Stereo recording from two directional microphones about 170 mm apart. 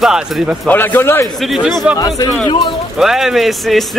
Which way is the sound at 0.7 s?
10° left (ahead or behind).